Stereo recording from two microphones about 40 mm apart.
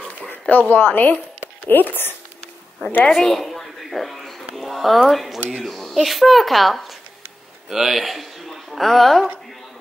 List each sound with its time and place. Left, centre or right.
0.3 s speech: left
3.1 s a sound: centre
4.6 s a woman's voice: centre